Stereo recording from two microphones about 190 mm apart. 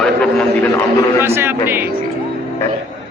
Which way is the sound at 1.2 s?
10° right (ahead or behind).